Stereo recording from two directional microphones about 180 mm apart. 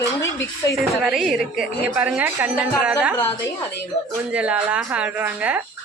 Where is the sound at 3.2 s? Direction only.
15° left (ahead or behind).